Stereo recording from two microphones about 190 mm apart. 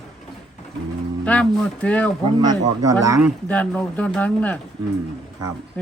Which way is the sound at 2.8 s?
15° right (ahead or behind).